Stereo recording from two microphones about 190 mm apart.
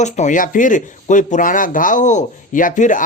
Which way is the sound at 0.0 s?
40° left (ahead or behind).